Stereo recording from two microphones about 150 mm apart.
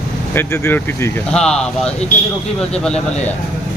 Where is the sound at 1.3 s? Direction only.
5° left (ahead or behind).